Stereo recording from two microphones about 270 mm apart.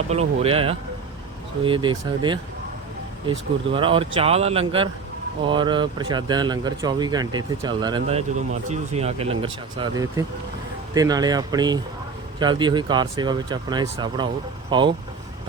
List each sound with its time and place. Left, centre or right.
0.1 s speech: right